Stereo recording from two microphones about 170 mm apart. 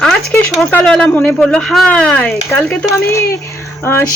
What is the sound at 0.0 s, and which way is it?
Speech, centre (ahead or behind).